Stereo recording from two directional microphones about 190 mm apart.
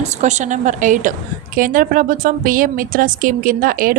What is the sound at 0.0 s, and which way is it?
A woman's voice, 40° right (ahead or behind).